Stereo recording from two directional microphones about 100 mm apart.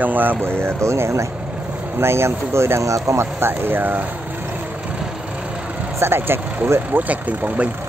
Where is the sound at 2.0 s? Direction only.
25° right (ahead or behind).